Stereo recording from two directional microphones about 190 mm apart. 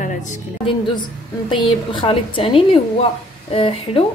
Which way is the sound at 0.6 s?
25° left (ahead or behind).